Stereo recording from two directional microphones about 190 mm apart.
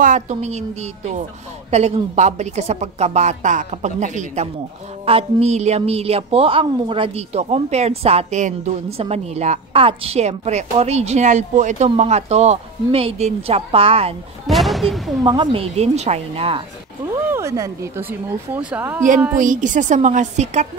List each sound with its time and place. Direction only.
0.0 s a woman's voice: 40° right (ahead or behind)
14.5 s speech: centre (ahead or behind)
15.2 s a woman's voice: 25° right (ahead or behind)
17.3 s speech: 15° right (ahead or behind)
19.3 s a woman's voice: 45° right (ahead or behind)